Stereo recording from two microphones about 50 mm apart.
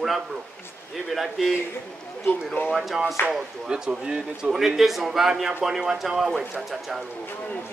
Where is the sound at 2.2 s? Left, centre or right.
Left.